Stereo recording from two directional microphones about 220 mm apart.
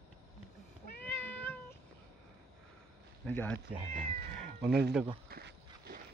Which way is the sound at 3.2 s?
5° left (ahead or behind).